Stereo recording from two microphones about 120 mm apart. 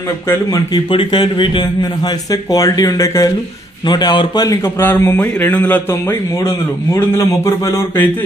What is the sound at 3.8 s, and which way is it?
A man's voice, 40° left (ahead or behind).